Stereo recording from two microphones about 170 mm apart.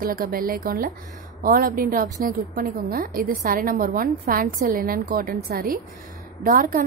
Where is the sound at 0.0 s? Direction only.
60° right (ahead or behind).